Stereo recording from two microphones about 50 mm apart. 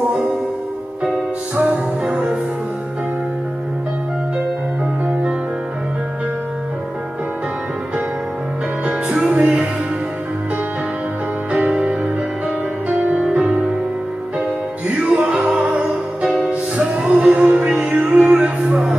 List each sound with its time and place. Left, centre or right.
1.6 s music: right
8.8 s music: right
11.5 s music: right
14.9 s music: right